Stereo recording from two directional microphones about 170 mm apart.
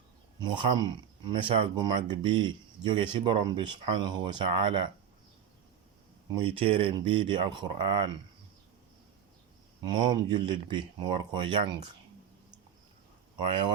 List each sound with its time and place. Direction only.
0.3 s speech: 30° right (ahead or behind)
6.4 s speech: 35° right (ahead or behind)
9.8 s speech: 25° right (ahead or behind)